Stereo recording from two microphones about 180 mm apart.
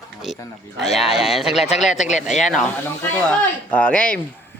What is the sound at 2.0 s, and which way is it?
Speech, 40° left (ahead or behind).